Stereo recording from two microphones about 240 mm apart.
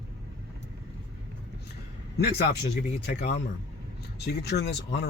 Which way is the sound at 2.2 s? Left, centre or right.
Left.